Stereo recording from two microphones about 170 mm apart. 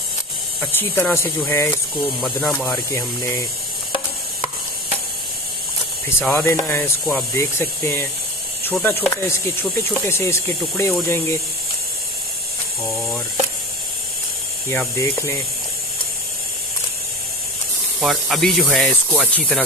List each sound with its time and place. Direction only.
0.6 s speech: 10° left (ahead or behind)
2.2 s speech: centre (ahead or behind)
2.7 s speech: 15° left (ahead or behind)
6.0 s speech: 15° left (ahead or behind)
8.7 s speech: 5° left (ahead or behind)
9.1 s speech: 15° left (ahead or behind)
14.7 s speech: 15° left (ahead or behind)
18.0 s speech: centre (ahead or behind)